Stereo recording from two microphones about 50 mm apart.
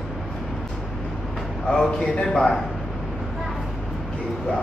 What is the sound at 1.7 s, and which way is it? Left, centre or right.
Speech, centre.